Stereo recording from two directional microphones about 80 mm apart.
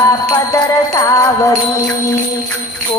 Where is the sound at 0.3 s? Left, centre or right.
Left.